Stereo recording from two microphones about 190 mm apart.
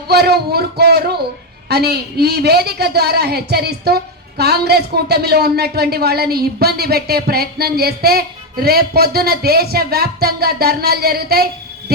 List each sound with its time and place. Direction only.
0.1 s a woman's voice: 60° right (ahead or behind)